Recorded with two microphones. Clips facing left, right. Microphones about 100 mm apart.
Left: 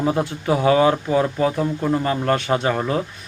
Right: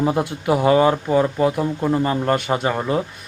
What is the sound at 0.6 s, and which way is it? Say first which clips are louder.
Speech: even; 25° right (ahead or behind).